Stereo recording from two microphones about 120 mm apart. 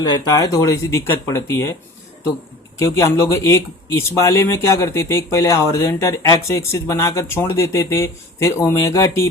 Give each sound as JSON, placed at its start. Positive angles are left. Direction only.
{"t": 0.0, "sound": "speech", "side_deg": 35}
{"t": 2.7, "sound": "speech", "side_deg": 25}